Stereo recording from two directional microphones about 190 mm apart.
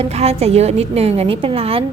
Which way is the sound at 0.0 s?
30° right (ahead or behind).